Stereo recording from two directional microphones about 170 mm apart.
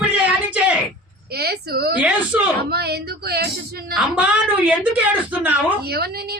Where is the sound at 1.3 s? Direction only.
70° right (ahead or behind).